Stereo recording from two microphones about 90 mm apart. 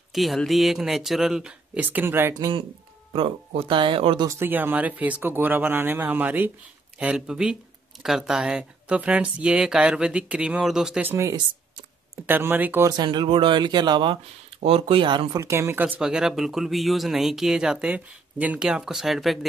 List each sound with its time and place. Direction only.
0.1 s speech: centre (ahead or behind)
1.8 s speech: 20° right (ahead or behind)
3.1 s speech: 90° right
4.3 s speech: 25° right (ahead or behind); by 11.0 s 5° right (ahead or behind)
11.0 s speech: 25° right (ahead or behind)
12.3 s speech: 25° right (ahead or behind)
12.9 s speech: 55° right (ahead or behind)
14.6 s speech: 90° right; by 15.2 s 70° right (ahead or behind)
15.3 s speech: 35° right (ahead or behind)
15.7 s speech: 20° right (ahead or behind)
16.0 s speech: 10° right (ahead or behind)